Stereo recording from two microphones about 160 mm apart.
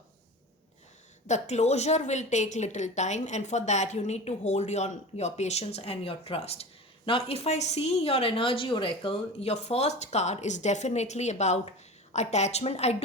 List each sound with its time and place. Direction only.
1.3 s a woman's voice: 45° left (ahead or behind)